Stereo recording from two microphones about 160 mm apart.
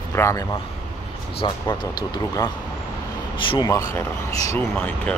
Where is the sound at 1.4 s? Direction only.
30° left (ahead or behind).